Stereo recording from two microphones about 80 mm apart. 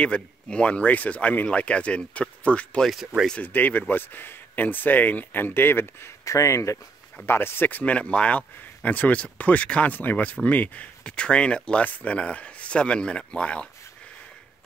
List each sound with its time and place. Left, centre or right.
0.0 s speech: centre
6.2 s speech: left
7.2 s speech: left